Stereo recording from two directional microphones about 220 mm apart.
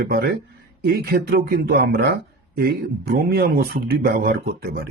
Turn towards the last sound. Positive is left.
turn(degrees=-40)  # may be behind; listen again after turning